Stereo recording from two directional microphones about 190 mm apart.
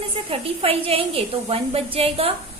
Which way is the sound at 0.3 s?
30° right (ahead or behind).